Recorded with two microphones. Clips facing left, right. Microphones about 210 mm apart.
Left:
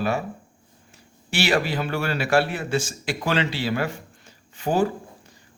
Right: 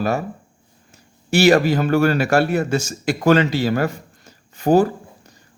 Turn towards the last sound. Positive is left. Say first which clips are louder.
# right 7 dB
turn(degrees=-40)  # may be behind; listen again after turning